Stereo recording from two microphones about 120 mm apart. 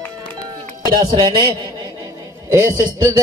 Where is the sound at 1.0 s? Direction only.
35° right (ahead or behind).